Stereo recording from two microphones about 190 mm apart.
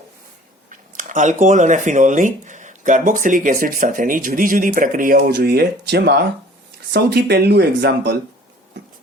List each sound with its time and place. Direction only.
0.7 s speech: 40° right (ahead or behind); by 8.2 s 60° right (ahead or behind)